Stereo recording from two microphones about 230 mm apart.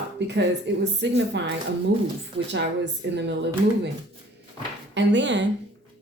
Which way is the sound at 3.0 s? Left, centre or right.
Right.